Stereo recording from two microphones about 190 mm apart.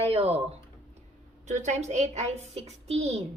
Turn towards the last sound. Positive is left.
turn(degrees=-35)  # may be behind; listen again after turning